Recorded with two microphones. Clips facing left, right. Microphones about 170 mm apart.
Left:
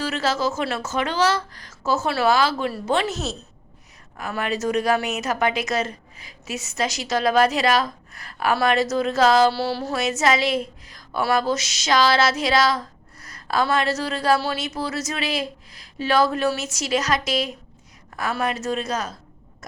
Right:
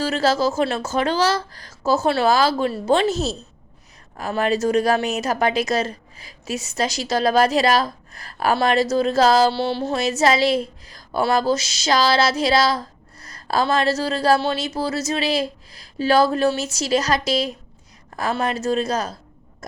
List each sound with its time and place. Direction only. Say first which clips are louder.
0.0 s a woman's voice: right 4 dB; 35° right (ahead or behind)